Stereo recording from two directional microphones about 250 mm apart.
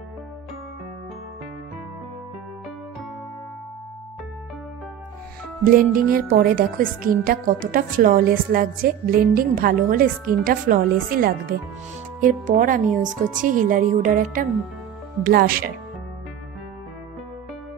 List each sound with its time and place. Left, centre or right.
5.6 s speech: right